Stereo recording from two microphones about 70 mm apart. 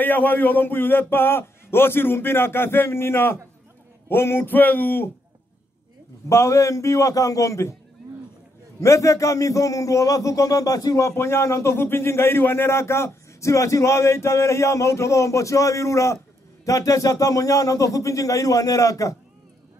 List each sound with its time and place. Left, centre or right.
0.0 s a man's voice: left
6.2 s a man's voice: left
8.8 s a man's voice: left
11.1 s a man's voice: left